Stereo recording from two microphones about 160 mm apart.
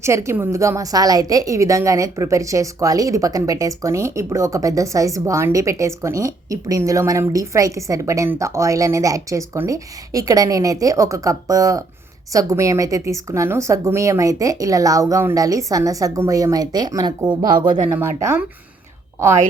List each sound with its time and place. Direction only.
0.0 s a woman's voice: 15° right (ahead or behind)